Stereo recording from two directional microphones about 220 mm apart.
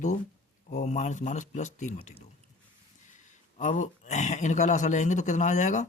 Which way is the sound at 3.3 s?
35° left (ahead or behind).